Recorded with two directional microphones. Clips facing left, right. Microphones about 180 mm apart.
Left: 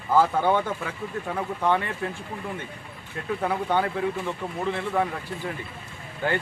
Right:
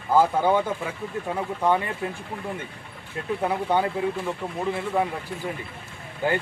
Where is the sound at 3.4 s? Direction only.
15° right (ahead or behind).